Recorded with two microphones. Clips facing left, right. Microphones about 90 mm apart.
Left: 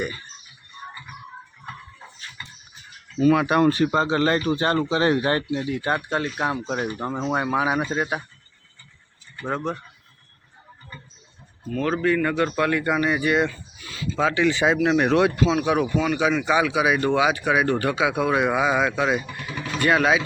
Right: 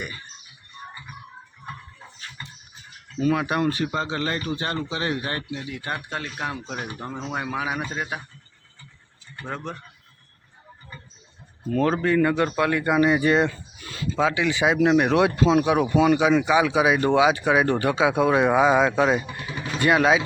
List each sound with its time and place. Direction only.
2.4 s a sound: 35° right (ahead or behind)
3.2 s speech: 85° left
3.7 s speech: 35° left (ahead or behind)
11.7 s speech: 30° right (ahead or behind)
12.2 s speech: 15° right (ahead or behind)
13.8 s a sound: 45° right (ahead or behind)
14.2 s speech: 10° right (ahead or behind)